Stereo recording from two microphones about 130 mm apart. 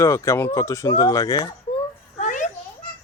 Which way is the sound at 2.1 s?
70° left (ahead or behind).